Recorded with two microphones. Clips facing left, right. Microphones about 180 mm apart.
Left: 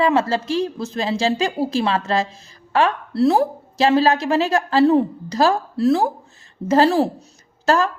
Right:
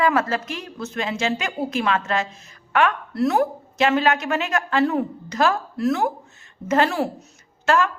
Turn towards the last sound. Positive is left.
turn(degrees=35)  # may be behind; listen again after turning